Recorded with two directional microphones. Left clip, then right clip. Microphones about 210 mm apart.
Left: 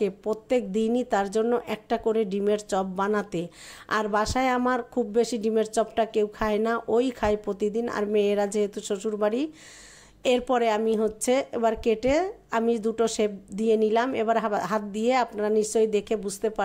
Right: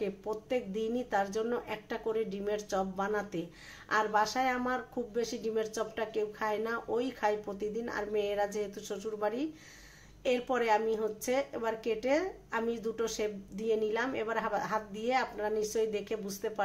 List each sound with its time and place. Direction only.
0.0 s speech: 45° left (ahead or behind)